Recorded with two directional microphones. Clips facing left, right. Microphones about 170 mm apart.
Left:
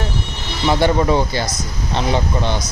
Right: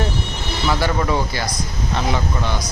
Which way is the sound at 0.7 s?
25° left (ahead or behind).